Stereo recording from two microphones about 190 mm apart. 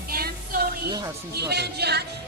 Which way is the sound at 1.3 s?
60° right (ahead or behind).